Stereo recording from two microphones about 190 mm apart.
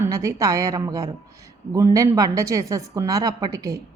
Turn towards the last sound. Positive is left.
turn(degrees=-20)  # may be behind; listen again after turning